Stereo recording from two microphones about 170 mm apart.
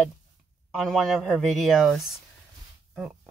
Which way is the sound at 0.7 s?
Centre (ahead or behind).